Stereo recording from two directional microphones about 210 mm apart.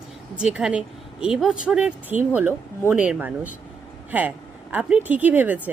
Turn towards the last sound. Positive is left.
turn(degrees=-10)  # may be behind; listen again after turning